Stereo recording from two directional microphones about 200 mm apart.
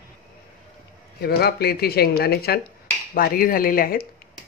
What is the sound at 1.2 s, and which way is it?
Speech, 55° left (ahead or behind).